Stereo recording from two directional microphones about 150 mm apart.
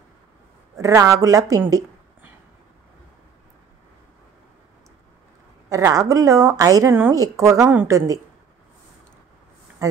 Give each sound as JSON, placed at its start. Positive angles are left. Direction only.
{"t": 0.7, "sound": "speech", "side_deg": -20}
{"t": 5.7, "sound": "speech", "side_deg": -20}
{"t": 9.8, "sound": "speech", "side_deg": -20}